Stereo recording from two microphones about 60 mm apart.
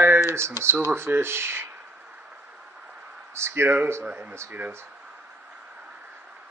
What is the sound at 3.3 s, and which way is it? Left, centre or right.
Speech, right.